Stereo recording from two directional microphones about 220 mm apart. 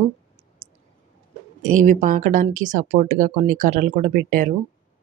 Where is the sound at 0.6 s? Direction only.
25° right (ahead or behind).